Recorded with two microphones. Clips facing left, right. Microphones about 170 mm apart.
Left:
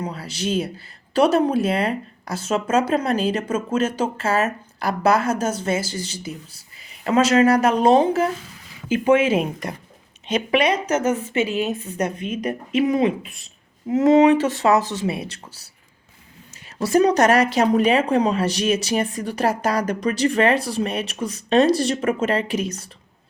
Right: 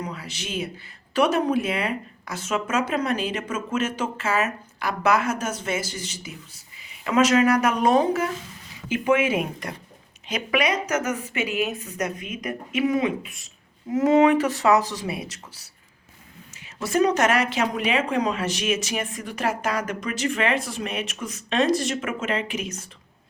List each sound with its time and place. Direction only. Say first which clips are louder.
0.0 s a woman's voice: left 6 dB; 35° left (ahead or behind)
13.9 s a woman's voice: left 3 dB; 20° left (ahead or behind)